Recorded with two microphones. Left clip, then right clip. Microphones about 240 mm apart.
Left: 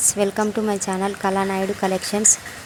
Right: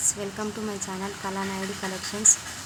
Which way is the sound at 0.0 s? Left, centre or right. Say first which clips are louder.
Left 10 dB; left.